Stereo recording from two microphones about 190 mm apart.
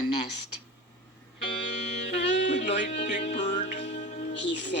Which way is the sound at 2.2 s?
65° left (ahead or behind).